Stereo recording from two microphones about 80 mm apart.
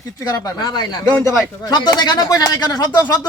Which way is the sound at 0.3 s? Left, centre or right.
Left.